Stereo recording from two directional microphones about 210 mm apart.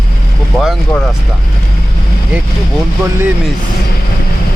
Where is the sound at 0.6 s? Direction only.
Centre (ahead or behind).